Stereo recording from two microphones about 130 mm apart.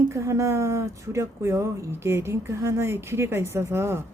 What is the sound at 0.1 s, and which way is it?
Speech, 25° right (ahead or behind).